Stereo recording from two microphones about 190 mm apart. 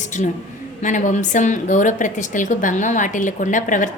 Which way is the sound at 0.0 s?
40° left (ahead or behind).